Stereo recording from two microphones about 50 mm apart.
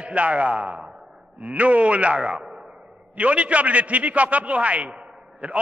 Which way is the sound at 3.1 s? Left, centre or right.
Right.